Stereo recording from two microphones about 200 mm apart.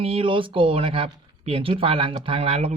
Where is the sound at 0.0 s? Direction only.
30° right (ahead or behind).